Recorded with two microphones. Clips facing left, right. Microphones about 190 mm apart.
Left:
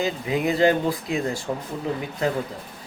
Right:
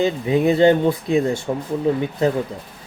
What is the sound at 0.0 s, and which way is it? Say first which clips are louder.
Speech: right 6 dB; 30° right (ahead or behind).